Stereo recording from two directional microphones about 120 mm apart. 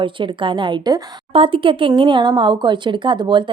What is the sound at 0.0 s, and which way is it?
Speech, 45° right (ahead or behind).